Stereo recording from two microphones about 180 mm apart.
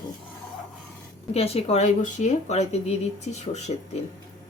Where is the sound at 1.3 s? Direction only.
35° left (ahead or behind).